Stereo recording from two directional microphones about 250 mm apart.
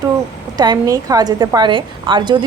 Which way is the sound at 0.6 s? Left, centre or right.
Centre.